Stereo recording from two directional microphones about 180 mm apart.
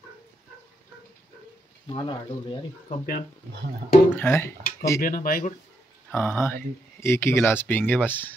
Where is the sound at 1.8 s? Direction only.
25° left (ahead or behind).